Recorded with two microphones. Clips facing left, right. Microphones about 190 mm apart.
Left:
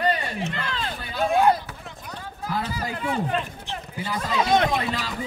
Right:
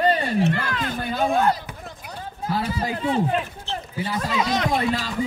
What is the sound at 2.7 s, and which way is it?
Speech, 25° right (ahead or behind).